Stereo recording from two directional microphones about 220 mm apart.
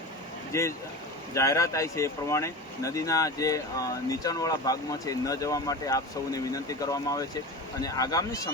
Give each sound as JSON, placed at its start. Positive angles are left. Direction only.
{"t": 0.5, "sound": "speech", "side_deg": 15}